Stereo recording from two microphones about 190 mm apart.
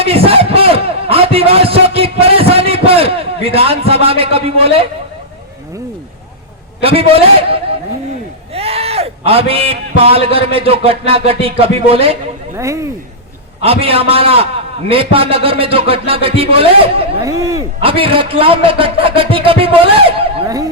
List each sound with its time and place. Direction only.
0.0 s a sound: 30° right (ahead or behind)
6.8 s music: 30° right (ahead or behind)
8.5 s a man's voice: 30° right (ahead or behind)
11.3 s music: 30° right (ahead or behind)
12.5 s speech: 15° right (ahead or behind)
13.6 s music: 30° right (ahead or behind)
14.8 s a man's voice: 30° right (ahead or behind)
17.2 s speech: 15° right (ahead or behind)
17.7 s a man's voice: 30° right (ahead or behind)